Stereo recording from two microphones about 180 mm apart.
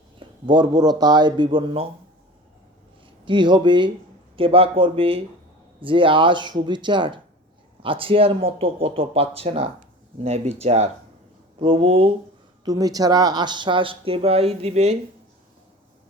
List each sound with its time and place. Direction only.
0.2 s speech: 25° right (ahead or behind)
3.2 s speech: 25° right (ahead or behind)
12.6 s speech: 20° right (ahead or behind)